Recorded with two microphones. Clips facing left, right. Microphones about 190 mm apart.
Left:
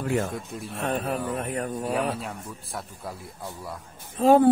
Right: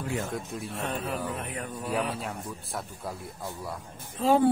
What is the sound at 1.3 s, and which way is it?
Speech, 45° left (ahead or behind).